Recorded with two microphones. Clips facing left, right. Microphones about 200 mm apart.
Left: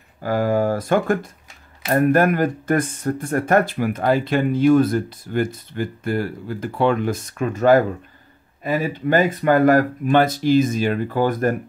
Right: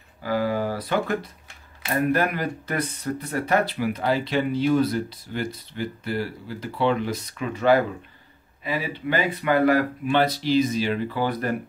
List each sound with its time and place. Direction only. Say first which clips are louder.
0.2 s speech: left 5 dB; 50° left (ahead or behind)